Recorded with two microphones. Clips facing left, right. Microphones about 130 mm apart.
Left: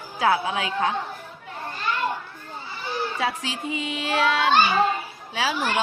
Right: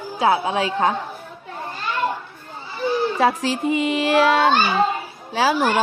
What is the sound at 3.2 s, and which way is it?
A woman's voice, 45° right (ahead or behind).